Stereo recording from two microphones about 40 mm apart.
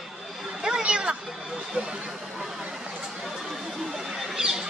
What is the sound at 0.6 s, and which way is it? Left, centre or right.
Children playing, centre.